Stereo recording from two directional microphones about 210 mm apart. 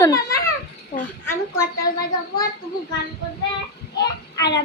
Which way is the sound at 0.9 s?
30° left (ahead or behind).